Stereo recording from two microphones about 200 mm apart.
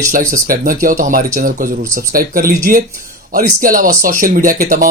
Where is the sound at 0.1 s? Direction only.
45° right (ahead or behind).